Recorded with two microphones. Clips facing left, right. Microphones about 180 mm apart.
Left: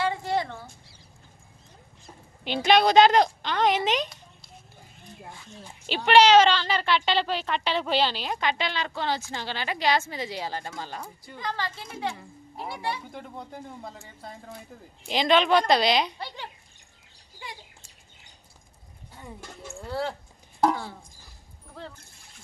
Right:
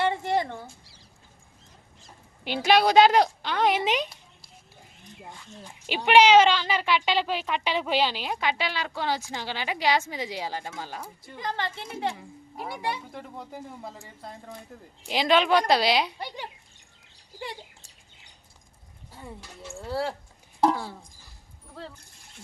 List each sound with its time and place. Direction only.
0.0 s a sound: 20° right (ahead or behind)
2.4 s speech: 10° right (ahead or behind)
6.1 s speech: 10° right (ahead or behind)
11.3 s speech: 20° right (ahead or behind)
12.1 s a woman's voice: 10° right (ahead or behind)
13.1 s speech: centre (ahead or behind)
19.7 s speech: 5° right (ahead or behind)